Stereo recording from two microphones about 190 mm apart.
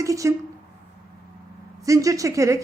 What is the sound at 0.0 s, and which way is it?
Speech, 15° right (ahead or behind).